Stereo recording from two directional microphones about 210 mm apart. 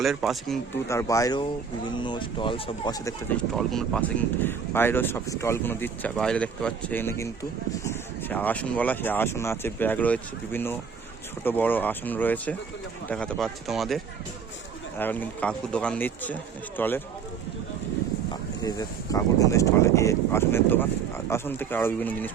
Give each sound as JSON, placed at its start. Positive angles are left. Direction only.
{"t": 0.0, "sound": "speech", "side_deg": 0}
{"t": 0.9, "sound": "speech", "side_deg": 15}
{"t": 3.5, "sound": "speech", "side_deg": 0}
{"t": 18.6, "sound": "speech", "side_deg": 15}